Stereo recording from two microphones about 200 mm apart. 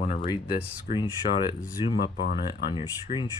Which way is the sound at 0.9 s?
40° left (ahead or behind).